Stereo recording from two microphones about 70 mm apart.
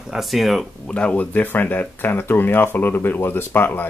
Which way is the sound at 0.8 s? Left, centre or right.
Centre.